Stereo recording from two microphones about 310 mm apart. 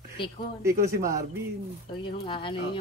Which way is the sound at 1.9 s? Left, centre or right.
Centre.